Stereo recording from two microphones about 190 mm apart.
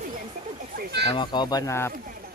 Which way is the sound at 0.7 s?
55° right (ahead or behind).